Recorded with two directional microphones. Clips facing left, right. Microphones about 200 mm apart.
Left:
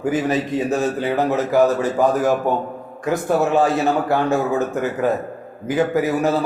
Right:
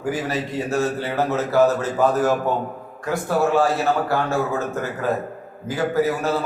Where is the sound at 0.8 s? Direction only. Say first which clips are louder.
Left 2 dB; 15° left (ahead or behind).